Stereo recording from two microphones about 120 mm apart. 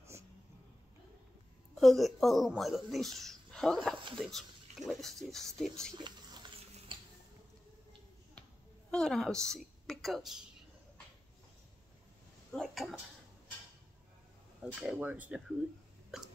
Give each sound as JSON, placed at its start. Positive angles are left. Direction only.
{"t": 1.8, "sound": "speech", "side_deg": 0}
{"t": 5.9, "sound": "a sound", "side_deg": -40}
{"t": 6.9, "sound": "squish", "side_deg": -45}
{"t": 8.9, "sound": "a woman's voice", "side_deg": 5}
{"t": 12.5, "sound": "speech", "side_deg": 0}
{"t": 14.6, "sound": "speech", "side_deg": -5}